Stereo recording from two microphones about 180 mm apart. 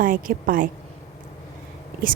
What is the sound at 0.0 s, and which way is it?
Speech, 50° right (ahead or behind).